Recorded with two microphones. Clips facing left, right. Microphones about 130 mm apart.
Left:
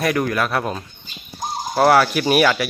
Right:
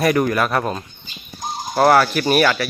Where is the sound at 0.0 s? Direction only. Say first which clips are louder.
Right 3 dB; centre (ahead or behind).